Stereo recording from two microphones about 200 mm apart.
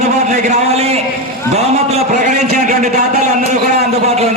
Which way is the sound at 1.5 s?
35° right (ahead or behind).